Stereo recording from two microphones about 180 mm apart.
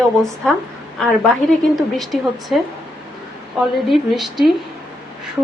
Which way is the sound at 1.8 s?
Centre (ahead or behind).